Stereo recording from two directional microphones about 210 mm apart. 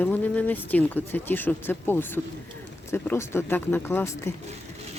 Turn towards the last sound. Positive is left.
turn(degrees=10)  # may be behind; listen again after turning